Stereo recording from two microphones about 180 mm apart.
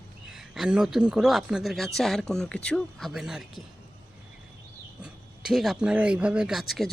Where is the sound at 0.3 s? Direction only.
Centre (ahead or behind).